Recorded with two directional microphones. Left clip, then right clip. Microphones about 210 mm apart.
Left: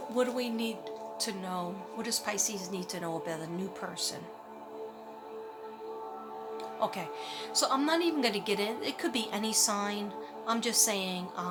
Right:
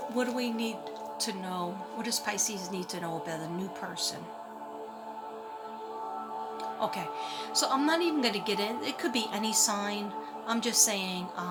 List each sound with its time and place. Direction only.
0.2 s a woman's voice: 10° left (ahead or behind)
6.7 s a woman's voice: 10° left (ahead or behind)